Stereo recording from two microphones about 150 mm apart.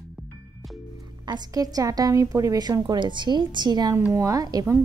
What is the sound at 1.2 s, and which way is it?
A woman's voice, 25° right (ahead or behind).